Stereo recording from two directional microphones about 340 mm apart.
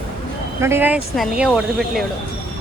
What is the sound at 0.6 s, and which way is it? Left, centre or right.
Speech, centre.